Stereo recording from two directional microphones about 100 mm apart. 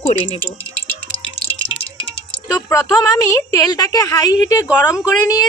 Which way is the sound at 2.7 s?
30° left (ahead or behind).